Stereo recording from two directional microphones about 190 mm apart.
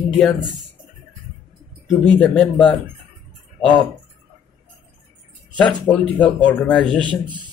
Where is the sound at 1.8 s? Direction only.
Centre (ahead or behind).